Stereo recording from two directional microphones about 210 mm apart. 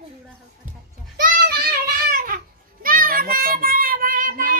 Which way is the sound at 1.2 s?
45° right (ahead or behind).